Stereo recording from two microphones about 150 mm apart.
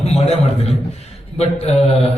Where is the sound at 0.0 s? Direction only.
45° left (ahead or behind).